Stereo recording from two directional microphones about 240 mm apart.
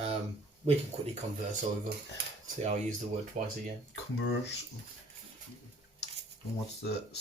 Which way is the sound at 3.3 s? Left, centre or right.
Right.